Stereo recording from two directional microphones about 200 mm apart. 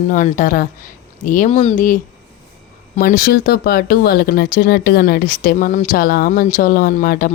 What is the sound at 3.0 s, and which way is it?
Speech, 45° left (ahead or behind).